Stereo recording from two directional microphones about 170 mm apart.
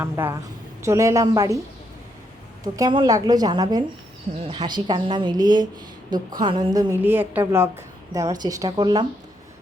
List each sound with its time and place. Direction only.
0.0 s a woman's voice: 15° right (ahead or behind)
2.7 s a woman's voice: 25° right (ahead or behind)
7.0 s a woman's voice: 10° right (ahead or behind)